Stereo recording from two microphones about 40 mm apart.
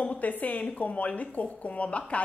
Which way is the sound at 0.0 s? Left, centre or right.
Left.